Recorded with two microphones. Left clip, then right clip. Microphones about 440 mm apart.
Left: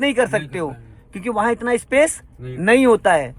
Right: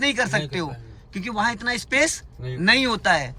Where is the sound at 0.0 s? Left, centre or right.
Centre.